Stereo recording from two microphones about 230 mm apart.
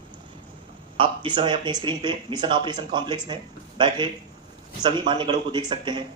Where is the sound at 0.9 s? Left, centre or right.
Right.